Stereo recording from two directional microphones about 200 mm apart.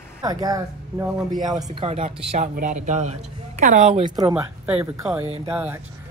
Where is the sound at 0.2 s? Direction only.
15° right (ahead or behind).